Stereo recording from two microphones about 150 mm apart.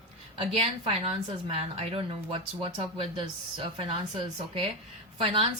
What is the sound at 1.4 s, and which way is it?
Speech, 40° right (ahead or behind).